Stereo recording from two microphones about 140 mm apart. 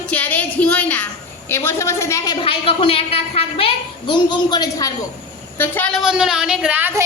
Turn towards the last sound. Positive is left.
turn(degrees=-15)  # may be behind; listen again after turning